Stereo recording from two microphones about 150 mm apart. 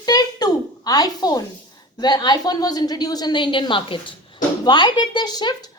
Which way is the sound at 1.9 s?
30° left (ahead or behind).